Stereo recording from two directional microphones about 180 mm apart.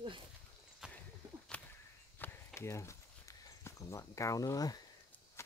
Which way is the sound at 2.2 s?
15° left (ahead or behind).